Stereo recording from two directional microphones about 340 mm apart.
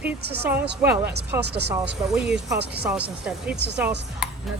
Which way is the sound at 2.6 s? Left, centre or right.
Right.